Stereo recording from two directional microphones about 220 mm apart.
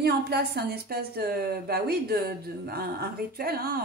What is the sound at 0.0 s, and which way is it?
A woman's voice, 45° right (ahead or behind).